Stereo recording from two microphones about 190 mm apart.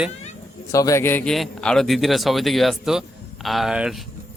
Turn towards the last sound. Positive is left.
turn(degrees=0)  # may be behind; listen again after turning